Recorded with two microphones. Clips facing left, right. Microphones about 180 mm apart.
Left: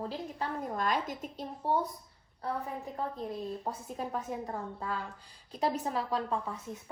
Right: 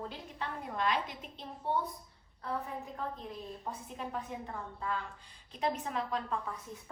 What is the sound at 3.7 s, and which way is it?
A woman's voice, 40° left (ahead or behind).